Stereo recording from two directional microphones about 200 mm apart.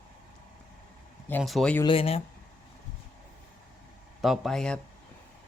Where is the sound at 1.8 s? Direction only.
25° left (ahead or behind).